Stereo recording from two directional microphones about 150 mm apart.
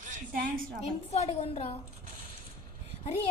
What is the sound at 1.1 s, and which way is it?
Speech, 45° left (ahead or behind).